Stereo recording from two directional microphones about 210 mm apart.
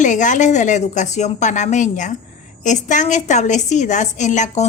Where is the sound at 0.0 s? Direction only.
35° left (ahead or behind).